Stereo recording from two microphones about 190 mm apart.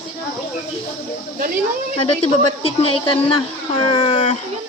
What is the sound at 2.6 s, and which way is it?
A woman's voice, 30° left (ahead or behind).